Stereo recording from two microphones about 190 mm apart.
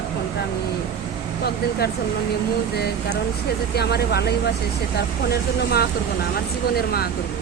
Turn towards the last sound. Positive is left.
turn(degrees=55)  # may be behind; listen again after turning